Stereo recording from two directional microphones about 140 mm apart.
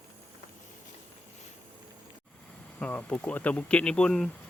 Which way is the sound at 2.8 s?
10° left (ahead or behind).